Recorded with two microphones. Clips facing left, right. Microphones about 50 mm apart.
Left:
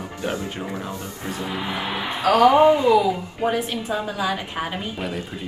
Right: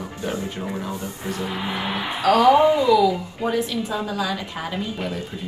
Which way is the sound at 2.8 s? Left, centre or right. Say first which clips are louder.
Right 1 dB; left.